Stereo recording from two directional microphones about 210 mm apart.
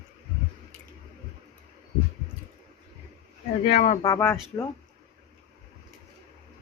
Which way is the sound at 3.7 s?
40° left (ahead or behind).